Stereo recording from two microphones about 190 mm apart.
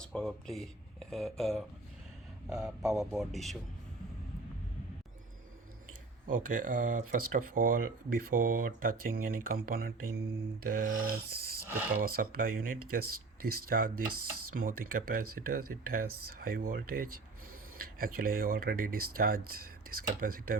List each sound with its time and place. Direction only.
0.0 s speech: 5° left (ahead or behind)
6.2 s speech: 45° right (ahead or behind)